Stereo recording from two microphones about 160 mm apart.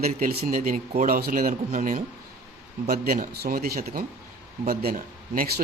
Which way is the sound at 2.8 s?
70° right (ahead or behind).